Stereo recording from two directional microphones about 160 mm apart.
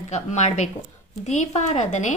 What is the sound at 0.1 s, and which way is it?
Speech, 45° left (ahead or behind).